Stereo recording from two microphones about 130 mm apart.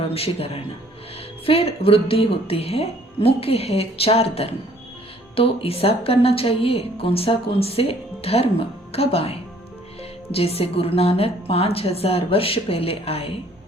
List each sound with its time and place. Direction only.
0.1 s a woman's voice: 50° left (ahead or behind)